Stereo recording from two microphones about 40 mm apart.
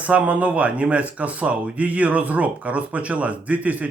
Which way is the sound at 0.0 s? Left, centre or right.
Right.